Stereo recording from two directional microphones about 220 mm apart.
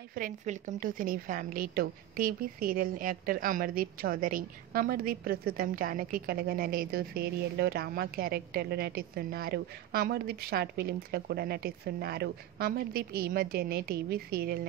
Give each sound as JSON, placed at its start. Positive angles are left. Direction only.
{"t": 0.1, "sound": "a woman's voice", "side_deg": -35}